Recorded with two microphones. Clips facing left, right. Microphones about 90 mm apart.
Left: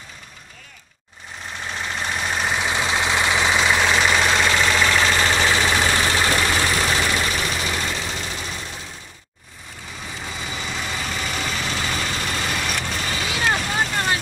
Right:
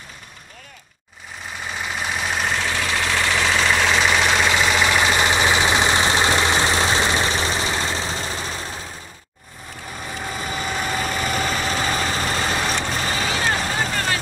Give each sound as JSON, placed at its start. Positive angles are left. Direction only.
{"t": 1.6, "sound": "vehicle", "side_deg": -5}
{"t": 2.7, "sound": "vehicle", "side_deg": 20}
{"t": 10.4, "sound": "vehicle", "side_deg": -45}